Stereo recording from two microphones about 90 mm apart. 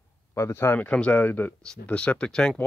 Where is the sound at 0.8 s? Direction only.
15° left (ahead or behind).